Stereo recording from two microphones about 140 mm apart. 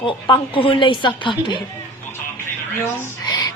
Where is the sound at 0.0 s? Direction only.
40° left (ahead or behind).